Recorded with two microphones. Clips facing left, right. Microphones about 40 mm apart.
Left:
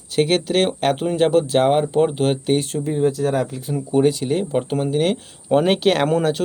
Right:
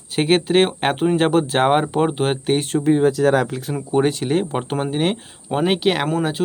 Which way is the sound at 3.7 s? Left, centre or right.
Right.